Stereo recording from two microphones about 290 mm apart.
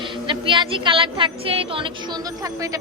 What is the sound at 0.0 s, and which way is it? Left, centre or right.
Speech, centre.